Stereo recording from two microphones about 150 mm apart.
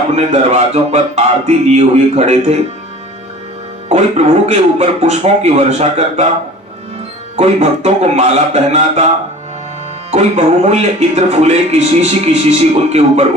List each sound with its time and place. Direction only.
0.2 s speech: 50° right (ahead or behind)
3.8 s speech: 45° right (ahead or behind)
7.3 s speech: 45° right (ahead or behind)
10.1 s speech: 50° right (ahead or behind)